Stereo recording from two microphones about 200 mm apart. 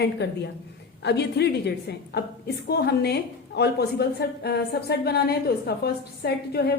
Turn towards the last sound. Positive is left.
turn(degrees=55)  # may be behind; listen again after turning